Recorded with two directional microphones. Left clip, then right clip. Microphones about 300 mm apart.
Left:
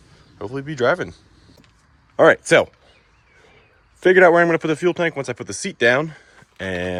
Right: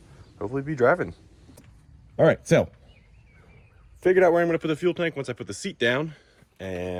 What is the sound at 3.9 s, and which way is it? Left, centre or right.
Speech, left.